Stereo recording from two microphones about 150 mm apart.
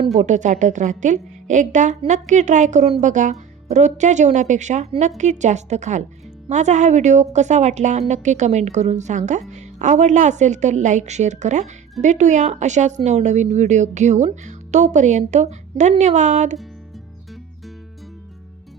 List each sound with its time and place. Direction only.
0.1 s a woman's voice: 50° right (ahead or behind)